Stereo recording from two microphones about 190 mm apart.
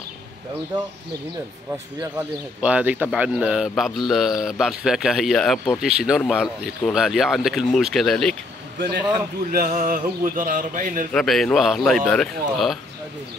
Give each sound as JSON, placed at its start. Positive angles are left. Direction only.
{"t": 1.7, "sound": "a man's voice", "side_deg": -10}
{"t": 8.7, "sound": "a man's voice", "side_deg": -60}
{"t": 9.5, "sound": "a man's voice", "side_deg": -45}
{"t": 11.1, "sound": "a man's voice", "side_deg": 0}